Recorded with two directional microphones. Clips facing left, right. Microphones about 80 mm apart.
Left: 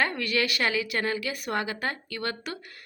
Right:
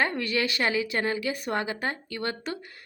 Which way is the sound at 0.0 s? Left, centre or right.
Right.